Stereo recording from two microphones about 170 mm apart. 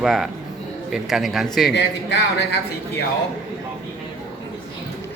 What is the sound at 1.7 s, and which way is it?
Speech, 90° left.